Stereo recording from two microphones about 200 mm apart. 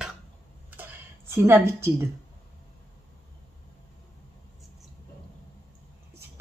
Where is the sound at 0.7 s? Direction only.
10° right (ahead or behind).